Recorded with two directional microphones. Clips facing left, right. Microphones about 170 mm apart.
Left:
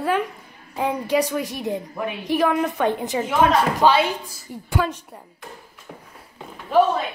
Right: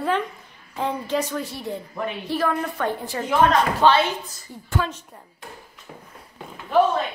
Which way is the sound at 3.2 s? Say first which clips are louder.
Even; 5° left (ahead or behind).